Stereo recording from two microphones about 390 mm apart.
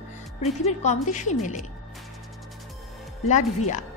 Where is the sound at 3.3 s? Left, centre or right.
Centre.